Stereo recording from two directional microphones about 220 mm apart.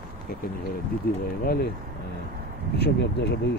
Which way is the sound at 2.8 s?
50° left (ahead or behind).